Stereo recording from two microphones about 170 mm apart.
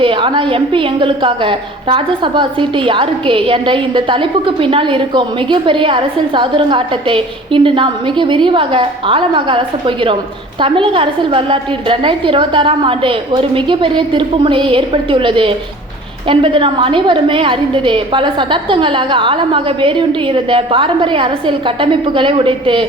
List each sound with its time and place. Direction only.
0.0 s a woman's voice: 30° right (ahead or behind)